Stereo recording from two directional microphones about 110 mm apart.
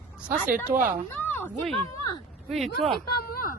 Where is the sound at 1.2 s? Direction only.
20° left (ahead or behind).